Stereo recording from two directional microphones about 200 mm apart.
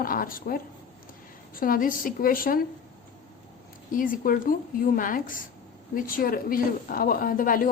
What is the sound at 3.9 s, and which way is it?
A woman's voice, 45° left (ahead or behind).